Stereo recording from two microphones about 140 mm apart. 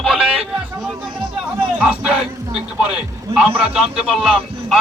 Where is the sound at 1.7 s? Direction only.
10° right (ahead or behind).